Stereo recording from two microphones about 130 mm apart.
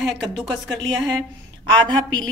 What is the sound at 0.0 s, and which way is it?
Speech, centre (ahead or behind).